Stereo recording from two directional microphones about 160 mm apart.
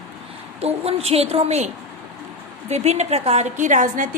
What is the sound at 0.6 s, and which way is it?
A woman's voice, 40° right (ahead or behind).